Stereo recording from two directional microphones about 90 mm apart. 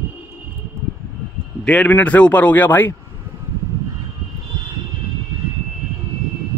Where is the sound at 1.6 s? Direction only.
15° left (ahead or behind).